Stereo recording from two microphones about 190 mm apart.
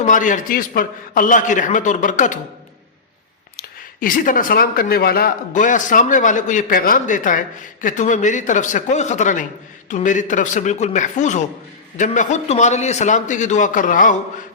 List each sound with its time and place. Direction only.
0.0 s a man's voice: 40° left (ahead or behind)
3.6 s a man's voice: 45° left (ahead or behind)